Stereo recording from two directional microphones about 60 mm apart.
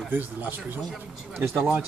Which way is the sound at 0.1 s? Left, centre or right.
Right.